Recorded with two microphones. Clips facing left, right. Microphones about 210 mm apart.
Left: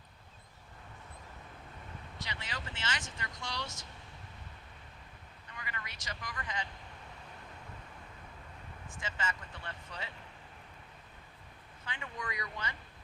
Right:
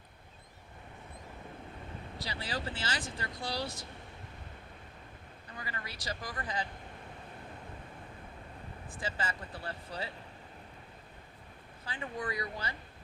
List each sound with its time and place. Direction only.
2.1 s speech: 35° right (ahead or behind)
5.5 s speech: 35° right (ahead or behind)
8.9 s speech: 35° right (ahead or behind)
11.9 s speech: 35° right (ahead or behind)